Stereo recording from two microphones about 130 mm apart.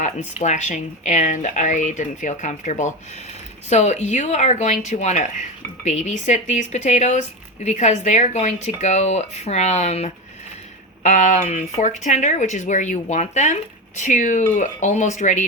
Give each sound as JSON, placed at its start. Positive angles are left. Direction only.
{"t": 0.0, "sound": "speech", "side_deg": 65}
{"t": 11.0, "sound": "speech", "side_deg": 70}